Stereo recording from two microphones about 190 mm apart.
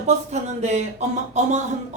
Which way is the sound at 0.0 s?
35° right (ahead or behind).